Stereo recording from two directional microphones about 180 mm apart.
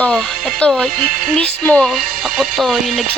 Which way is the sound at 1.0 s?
50° right (ahead or behind).